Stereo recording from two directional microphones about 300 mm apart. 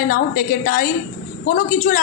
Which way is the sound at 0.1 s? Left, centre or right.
Left.